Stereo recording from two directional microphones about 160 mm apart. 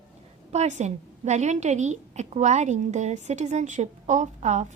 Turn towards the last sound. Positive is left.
turn(degrees=-50)  # may be behind; listen again after turning